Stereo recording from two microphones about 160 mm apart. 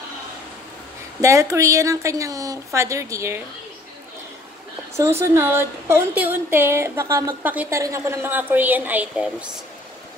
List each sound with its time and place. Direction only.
1.2 s a woman's voice: 20° right (ahead or behind)
4.9 s a woman's voice: 15° right (ahead or behind)